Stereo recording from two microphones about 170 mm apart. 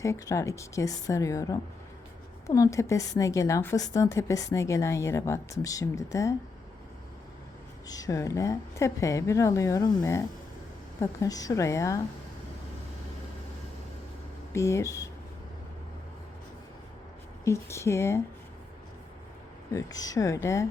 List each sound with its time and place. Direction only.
0.0 s a woman's voice: 15° left (ahead or behind)
7.9 s a woman's voice: 20° left (ahead or behind)
14.5 s a woman's voice: 15° left (ahead or behind)
17.4 s a woman's voice: 15° left (ahead or behind)
19.7 s a woman's voice: 20° left (ahead or behind)